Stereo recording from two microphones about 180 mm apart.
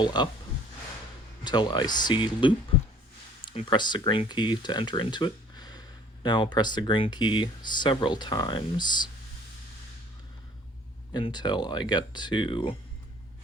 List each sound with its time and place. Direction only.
0.0 s speech: 25° left (ahead or behind)
1.5 s speech: 25° left (ahead or behind)
11.1 s speech: 25° left (ahead or behind)